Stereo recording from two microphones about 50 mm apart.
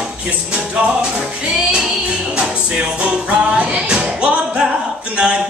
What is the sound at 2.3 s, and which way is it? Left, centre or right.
Music, right.